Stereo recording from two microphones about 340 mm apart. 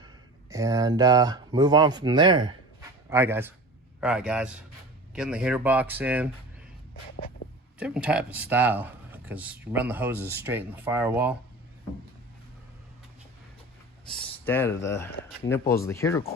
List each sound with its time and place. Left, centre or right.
0.5 s speech: centre
7.8 s speech: centre
14.1 s speech: centre